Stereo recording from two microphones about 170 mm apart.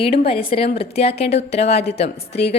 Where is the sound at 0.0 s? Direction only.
35° left (ahead or behind).